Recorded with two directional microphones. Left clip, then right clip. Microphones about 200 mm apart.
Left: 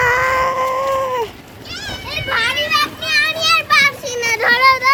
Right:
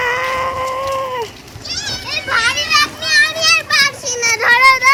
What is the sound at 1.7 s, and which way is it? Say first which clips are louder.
Children playing: right 4 dB; 5° left (ahead or behind).